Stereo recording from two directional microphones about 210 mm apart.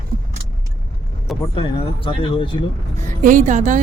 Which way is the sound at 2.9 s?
35° right (ahead or behind).